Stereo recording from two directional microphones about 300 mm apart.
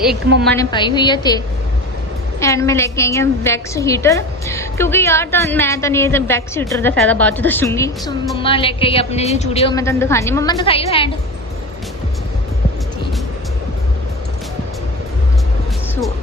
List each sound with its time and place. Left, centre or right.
0.3 s a woman's voice: right
0.5 s a woman's voice: centre
2.4 s a woman's voice: centre